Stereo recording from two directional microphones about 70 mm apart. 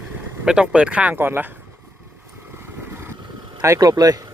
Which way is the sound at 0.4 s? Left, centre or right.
Centre.